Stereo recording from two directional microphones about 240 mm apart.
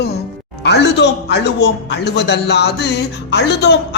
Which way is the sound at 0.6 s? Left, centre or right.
Left.